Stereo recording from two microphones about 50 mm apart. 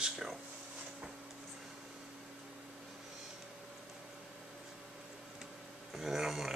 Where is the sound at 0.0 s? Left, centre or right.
Centre.